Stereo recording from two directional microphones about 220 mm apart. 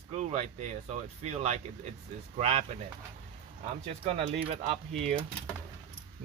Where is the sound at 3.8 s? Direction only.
30° right (ahead or behind).